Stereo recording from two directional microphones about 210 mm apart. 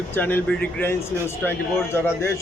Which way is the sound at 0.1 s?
10° left (ahead or behind).